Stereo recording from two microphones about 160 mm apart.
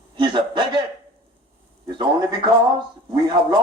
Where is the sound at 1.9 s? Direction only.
30° right (ahead or behind).